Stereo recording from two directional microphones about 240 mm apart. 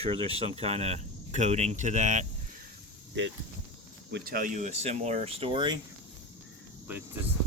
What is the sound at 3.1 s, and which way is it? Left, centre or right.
Speech, right.